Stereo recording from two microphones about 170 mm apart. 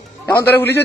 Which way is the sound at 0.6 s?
15° left (ahead or behind).